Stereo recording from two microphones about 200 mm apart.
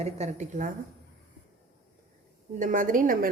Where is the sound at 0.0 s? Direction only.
35° right (ahead or behind).